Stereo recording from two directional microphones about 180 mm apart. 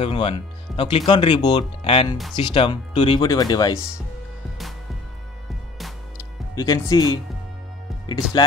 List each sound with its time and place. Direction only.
0.0 s speech: 30° left (ahead or behind)
6.5 s speech: 20° left (ahead or behind)
8.3 s speech: 25° left (ahead or behind)